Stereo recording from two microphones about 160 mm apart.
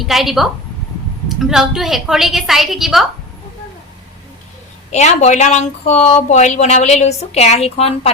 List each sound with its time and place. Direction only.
0.0 s a woman's voice: centre (ahead or behind)
4.9 s a woman's voice: 45° left (ahead or behind)